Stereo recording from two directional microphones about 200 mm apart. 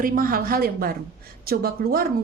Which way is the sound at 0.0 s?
45° right (ahead or behind).